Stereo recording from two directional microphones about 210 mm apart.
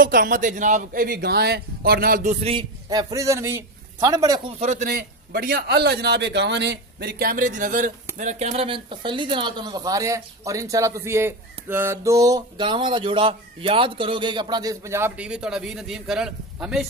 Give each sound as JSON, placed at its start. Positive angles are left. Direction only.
{"t": 0.0, "sound": "a man's voice", "side_deg": -40}
{"t": 2.4, "sound": "a man's voice", "side_deg": -20}
{"t": 4.6, "sound": "a man's voice", "side_deg": -35}